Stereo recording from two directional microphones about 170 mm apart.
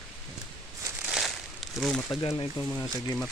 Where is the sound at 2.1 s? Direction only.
30° left (ahead or behind).